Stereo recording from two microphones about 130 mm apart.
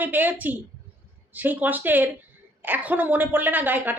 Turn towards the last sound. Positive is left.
turn(degrees=-15)  # may be behind; listen again after turning